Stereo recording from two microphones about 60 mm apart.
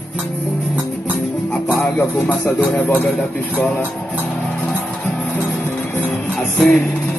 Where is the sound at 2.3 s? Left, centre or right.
Left.